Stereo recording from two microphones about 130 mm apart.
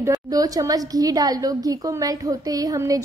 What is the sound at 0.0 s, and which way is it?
A woman's voice, 25° right (ahead or behind).